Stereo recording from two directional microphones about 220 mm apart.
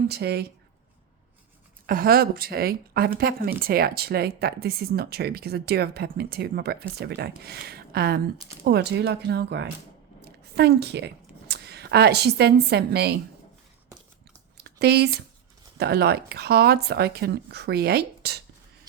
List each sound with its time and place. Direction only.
0.1 s speech: 45° right (ahead or behind)
1.9 s speech: 40° right (ahead or behind)
14.6 s a sound: 45° right (ahead or behind)
15.8 s speech: 45° right (ahead or behind)